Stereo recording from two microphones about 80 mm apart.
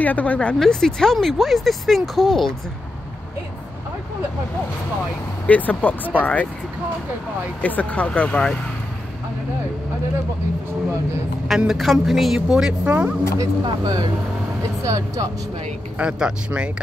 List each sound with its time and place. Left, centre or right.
0.0 s speech: centre
0.6 s speech: centre
5.5 s speech: left
7.6 s speech: centre
11.4 s a woman's voice: centre
13.4 s speech: right
16.0 s a woman's voice: centre